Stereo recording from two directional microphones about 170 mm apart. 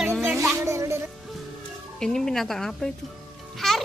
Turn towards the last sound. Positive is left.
turn(degrees=0)  # may be behind; listen again after turning